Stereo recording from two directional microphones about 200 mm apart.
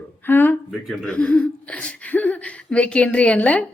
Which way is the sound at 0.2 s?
10° left (ahead or behind).